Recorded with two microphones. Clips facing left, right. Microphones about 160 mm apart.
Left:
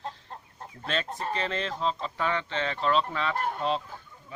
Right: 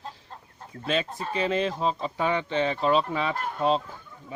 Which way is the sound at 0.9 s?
10° right (ahead or behind).